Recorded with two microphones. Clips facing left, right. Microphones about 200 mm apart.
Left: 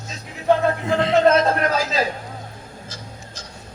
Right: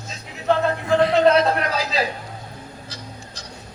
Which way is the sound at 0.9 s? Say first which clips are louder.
Right 6 dB; 25° left (ahead or behind).